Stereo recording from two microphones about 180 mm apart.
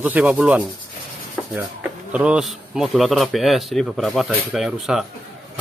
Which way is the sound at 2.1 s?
5° right (ahead or behind).